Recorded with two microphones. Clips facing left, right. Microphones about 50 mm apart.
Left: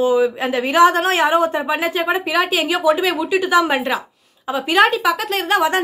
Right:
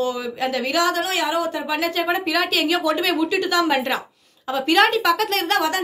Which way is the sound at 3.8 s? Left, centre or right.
Centre.